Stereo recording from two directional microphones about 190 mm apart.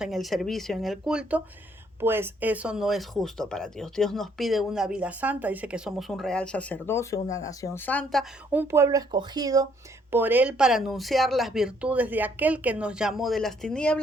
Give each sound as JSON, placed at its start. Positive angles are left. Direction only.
{"t": 0.0, "sound": "speech", "side_deg": 0}
{"t": 8.5, "sound": "speech", "side_deg": -15}